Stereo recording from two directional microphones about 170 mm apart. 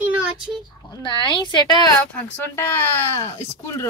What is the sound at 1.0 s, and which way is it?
Speech, 30° left (ahead or behind).